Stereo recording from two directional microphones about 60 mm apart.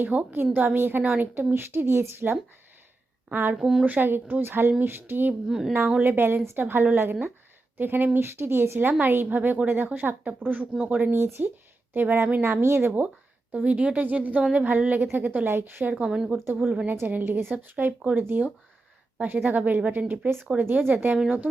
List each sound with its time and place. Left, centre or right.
0.0 s a woman's voice: right
3.5 s speech: centre
3.8 s a woman's voice: right
5.5 s speech: centre
6.0 s a woman's voice: right
11.1 s a woman's voice: right
13.5 s speech: right
15.4 s speech: right
15.8 s speech: right
16.0 s speech: centre
17.1 s a woman's voice: right